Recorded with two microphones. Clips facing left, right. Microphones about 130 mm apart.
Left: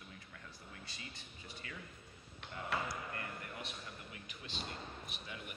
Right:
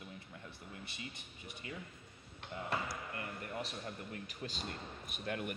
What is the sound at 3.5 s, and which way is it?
A man's voice, 40° right (ahead or behind).